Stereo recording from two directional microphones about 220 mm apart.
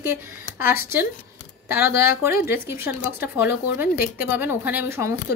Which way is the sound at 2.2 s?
10° right (ahead or behind).